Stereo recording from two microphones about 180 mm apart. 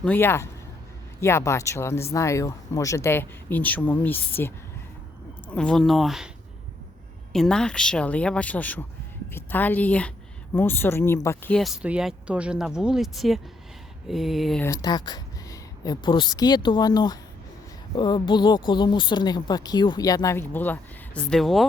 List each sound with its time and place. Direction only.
0.0 s speech: 10° left (ahead or behind)
7.3 s speech: 5° left (ahead or behind)
11.5 s speech: centre (ahead or behind)
14.6 s speech: 20° left (ahead or behind); by 21.7 s centre (ahead or behind)